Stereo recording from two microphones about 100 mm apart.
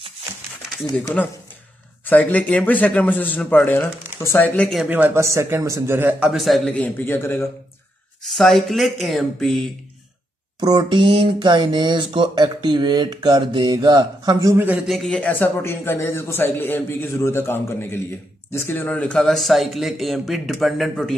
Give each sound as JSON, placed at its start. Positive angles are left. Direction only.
{"t": 0.9, "sound": "a man's voice", "side_deg": 15}
{"t": 4.8, "sound": "speech", "side_deg": -15}
{"t": 5.1, "sound": "a man's voice", "side_deg": -30}
{"t": 6.1, "sound": "speech", "side_deg": -5}
{"t": 6.7, "sound": "a man's voice", "side_deg": 20}
{"t": 8.2, "sound": "speech", "side_deg": 5}
{"t": 10.6, "sound": "speech", "side_deg": -45}
{"t": 14.9, "sound": "a man's voice", "side_deg": 5}